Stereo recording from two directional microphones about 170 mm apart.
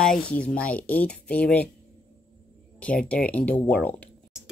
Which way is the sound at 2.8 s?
5° left (ahead or behind).